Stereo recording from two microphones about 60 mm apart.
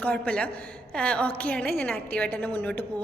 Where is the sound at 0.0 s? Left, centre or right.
Left.